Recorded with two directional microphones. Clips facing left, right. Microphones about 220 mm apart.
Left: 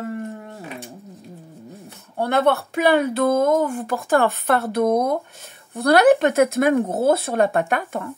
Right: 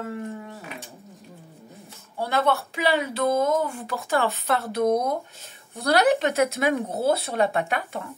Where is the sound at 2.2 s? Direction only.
60° left (ahead or behind).